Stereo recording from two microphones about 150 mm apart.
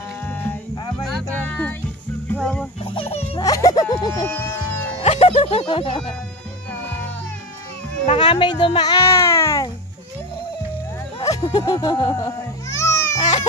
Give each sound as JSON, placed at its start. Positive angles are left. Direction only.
{"t": 0.2, "sound": "music", "side_deg": 10}
{"t": 2.3, "sound": "fowl", "side_deg": 5}
{"t": 2.8, "sound": "turkey", "side_deg": 40}
{"t": 3.3, "sound": "music", "side_deg": 25}
{"t": 5.0, "sound": "music", "side_deg": 45}
{"t": 8.2, "sound": "a child's voice", "side_deg": 30}
{"t": 11.1, "sound": "speech", "side_deg": 30}
{"t": 13.2, "sound": "music", "side_deg": 50}